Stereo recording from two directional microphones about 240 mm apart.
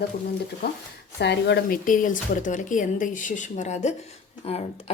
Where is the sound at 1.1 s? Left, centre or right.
Left.